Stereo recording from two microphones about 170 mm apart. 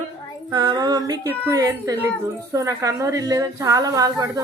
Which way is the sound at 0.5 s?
25° right (ahead or behind).